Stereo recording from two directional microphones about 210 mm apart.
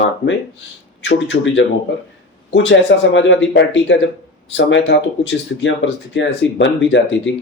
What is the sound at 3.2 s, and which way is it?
Speech, 60° left (ahead or behind).